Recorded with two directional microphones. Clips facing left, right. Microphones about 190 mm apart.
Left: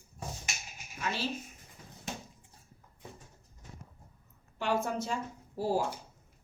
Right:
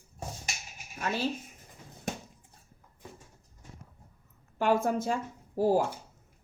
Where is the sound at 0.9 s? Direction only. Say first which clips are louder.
Right 3 dB; 45° right (ahead or behind).